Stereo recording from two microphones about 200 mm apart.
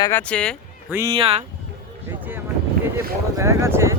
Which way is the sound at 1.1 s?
30° right (ahead or behind).